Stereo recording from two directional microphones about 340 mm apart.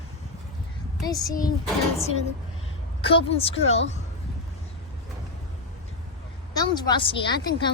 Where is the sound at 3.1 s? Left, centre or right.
Centre.